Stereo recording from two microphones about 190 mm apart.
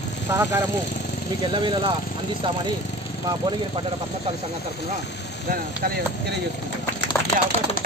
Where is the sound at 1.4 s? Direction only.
25° right (ahead or behind).